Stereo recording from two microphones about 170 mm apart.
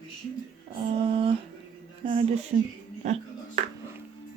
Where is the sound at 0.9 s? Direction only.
35° right (ahead or behind).